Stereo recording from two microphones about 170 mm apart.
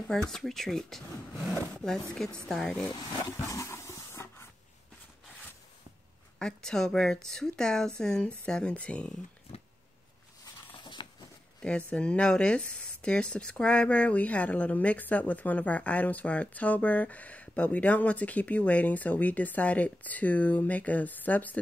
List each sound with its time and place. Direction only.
0.1 s a woman's voice: 5° left (ahead or behind)
2.4 s a woman's voice: centre (ahead or behind)
2.9 s speech: 25° left (ahead or behind)
3.3 s roaring cats: 15° left (ahead or behind)
6.4 s a woman's voice: 5° left (ahead or behind)
10.4 s a sound: 30° left (ahead or behind)
11.6 s speech: 5° left (ahead or behind)